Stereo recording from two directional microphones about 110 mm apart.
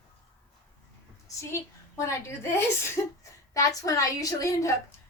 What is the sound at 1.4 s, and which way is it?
A woman's voice, 25° left (ahead or behind).